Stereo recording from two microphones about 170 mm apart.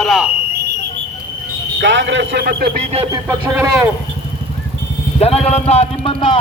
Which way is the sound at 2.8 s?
35° right (ahead or behind).